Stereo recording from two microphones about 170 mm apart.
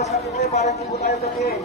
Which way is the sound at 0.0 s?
40° left (ahead or behind).